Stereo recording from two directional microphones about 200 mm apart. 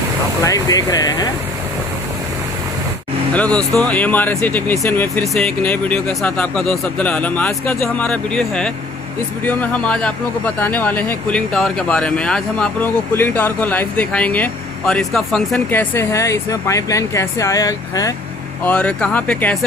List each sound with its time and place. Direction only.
0.4 s speech: 20° left (ahead or behind)
3.3 s speech: 5° left (ahead or behind)
18.7 s speech: 5° left (ahead or behind)